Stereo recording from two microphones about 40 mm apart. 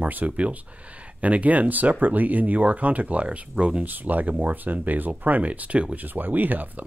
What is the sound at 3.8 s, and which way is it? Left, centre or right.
Speech, right.